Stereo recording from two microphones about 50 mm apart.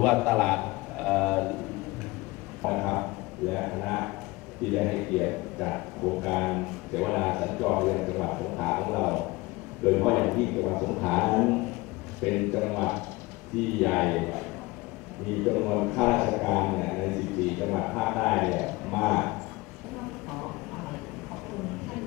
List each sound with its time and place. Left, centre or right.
0.0 s a man's voice: centre
2.6 s a man's voice: centre
15.4 s a man's voice: centre
20.3 s vehicle: centre